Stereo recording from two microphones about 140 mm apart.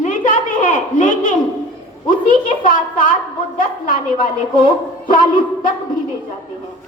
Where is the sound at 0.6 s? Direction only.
70° left (ahead or behind).